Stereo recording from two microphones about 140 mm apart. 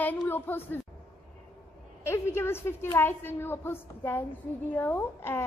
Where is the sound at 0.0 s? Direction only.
15° left (ahead or behind).